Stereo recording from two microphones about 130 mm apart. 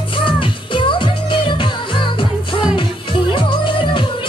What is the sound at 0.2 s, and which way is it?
Music, 40° left (ahead or behind).